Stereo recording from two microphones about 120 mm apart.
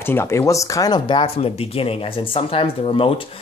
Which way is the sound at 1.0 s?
50° left (ahead or behind).